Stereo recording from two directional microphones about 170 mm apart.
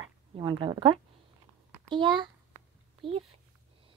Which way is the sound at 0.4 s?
25° right (ahead or behind).